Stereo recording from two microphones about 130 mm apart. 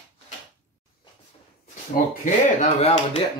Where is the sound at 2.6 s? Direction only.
55° left (ahead or behind).